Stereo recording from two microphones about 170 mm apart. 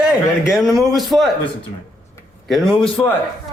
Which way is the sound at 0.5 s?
Centre (ahead or behind).